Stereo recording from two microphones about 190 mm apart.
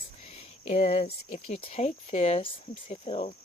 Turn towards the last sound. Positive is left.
turn(degrees=30)  # may be behind; listen again after turning